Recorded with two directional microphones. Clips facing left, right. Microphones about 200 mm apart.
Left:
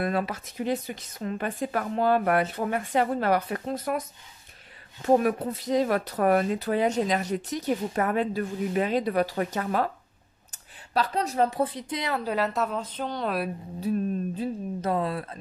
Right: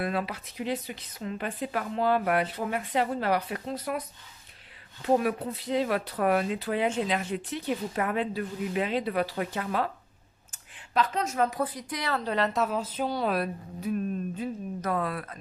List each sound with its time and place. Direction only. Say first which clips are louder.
0.0 s speech: left 3 dB; 45° left (ahead or behind)
5.0 s speech: left 3 dB; 45° left (ahead or behind)
11.0 s a woman's voice: left 2 dB; 35° left (ahead or behind)
12.2 s a woman's voice: right 1 dB; 5° left (ahead or behind)
13.7 s speech: left 3 dB; 35° left (ahead or behind)